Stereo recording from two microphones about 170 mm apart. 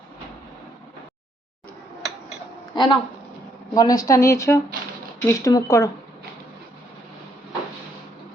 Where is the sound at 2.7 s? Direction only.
25° left (ahead or behind).